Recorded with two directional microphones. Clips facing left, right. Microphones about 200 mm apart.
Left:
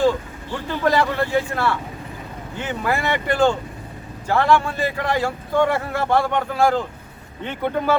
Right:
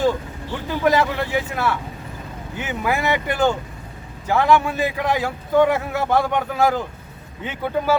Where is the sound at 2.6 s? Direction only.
15° right (ahead or behind).